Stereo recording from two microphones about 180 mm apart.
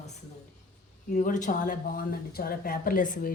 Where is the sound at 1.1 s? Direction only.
45° left (ahead or behind).